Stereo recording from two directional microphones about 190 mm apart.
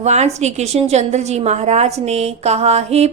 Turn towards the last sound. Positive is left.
turn(degrees=-35)  # may be behind; listen again after turning